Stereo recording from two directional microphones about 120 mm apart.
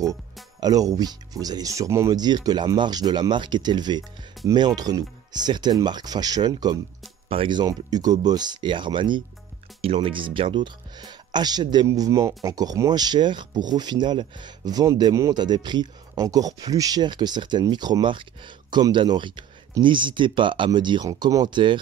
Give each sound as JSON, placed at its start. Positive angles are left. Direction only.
{"t": 0.0, "sound": "speech", "side_deg": -30}
{"t": 7.2, "sound": "speech", "side_deg": -50}
{"t": 7.5, "sound": "speech", "side_deg": -35}
{"t": 21.1, "sound": "speech", "side_deg": -30}